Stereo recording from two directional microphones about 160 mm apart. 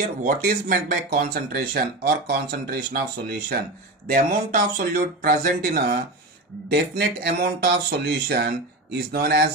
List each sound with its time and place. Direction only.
0.0 s speech: 55° right (ahead or behind); by 2.3 s 75° right (ahead or behind)
2.5 s speech: 85° right
4.1 s speech: 55° right (ahead or behind)
6.7 s speech: 85° right